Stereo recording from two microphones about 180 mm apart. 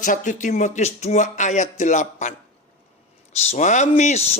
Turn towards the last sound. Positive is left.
turn(degrees=40)  # may be behind; listen again after turning